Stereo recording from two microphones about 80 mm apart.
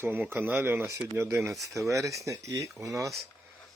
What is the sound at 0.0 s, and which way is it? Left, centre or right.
Speech, right.